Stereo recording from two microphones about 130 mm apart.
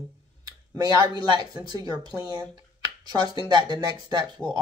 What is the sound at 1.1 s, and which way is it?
Speech, 35° right (ahead or behind).